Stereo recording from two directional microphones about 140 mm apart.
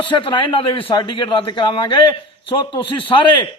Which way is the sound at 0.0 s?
35° left (ahead or behind).